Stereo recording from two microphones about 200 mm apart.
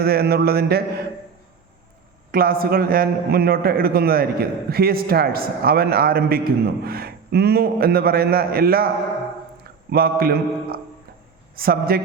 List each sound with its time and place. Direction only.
0.0 s a man's voice: 50° right (ahead or behind)
2.3 s a man's voice: 45° right (ahead or behind)
9.9 s a man's voice: 50° right (ahead or behind)